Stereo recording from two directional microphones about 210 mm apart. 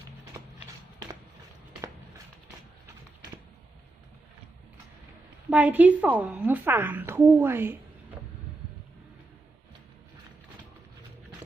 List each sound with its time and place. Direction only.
0.4 s clip-clop: 20° right (ahead or behind)
5.5 s a woman's voice: 5° right (ahead or behind)